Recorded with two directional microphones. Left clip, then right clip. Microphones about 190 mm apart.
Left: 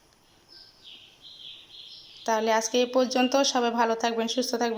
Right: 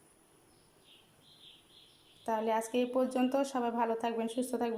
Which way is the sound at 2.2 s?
5° right (ahead or behind).